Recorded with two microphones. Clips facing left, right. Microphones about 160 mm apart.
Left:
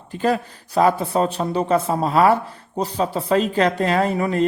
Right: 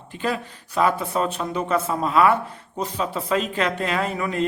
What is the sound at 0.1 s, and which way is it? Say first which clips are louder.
A woman's voice: left 6 dB; 40° left (ahead or behind).